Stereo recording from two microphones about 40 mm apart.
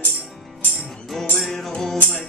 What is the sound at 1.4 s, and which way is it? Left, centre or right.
Music, centre.